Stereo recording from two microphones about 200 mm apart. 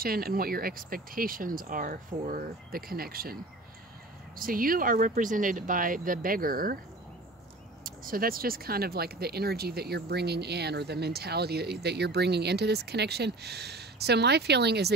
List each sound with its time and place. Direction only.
0.0 s speech: 50° right (ahead or behind)
4.4 s speech: 45° right (ahead or behind)
7.8 s speech: 45° right (ahead or behind)